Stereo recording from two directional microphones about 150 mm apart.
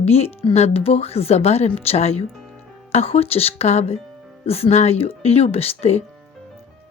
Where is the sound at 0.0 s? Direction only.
45° left (ahead or behind).